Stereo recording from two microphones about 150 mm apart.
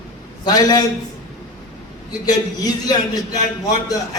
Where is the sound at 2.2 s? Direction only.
25° left (ahead or behind).